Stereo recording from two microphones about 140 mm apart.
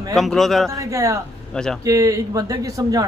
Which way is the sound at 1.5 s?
5° left (ahead or behind).